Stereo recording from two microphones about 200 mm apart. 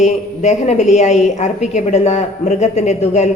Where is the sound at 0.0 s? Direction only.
35° left (ahead or behind).